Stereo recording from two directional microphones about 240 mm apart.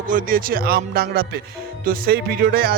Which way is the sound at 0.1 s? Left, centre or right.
Right.